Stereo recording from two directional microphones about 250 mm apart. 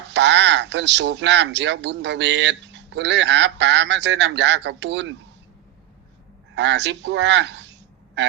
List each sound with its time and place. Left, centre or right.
0.1 s speech: right
6.6 s speech: right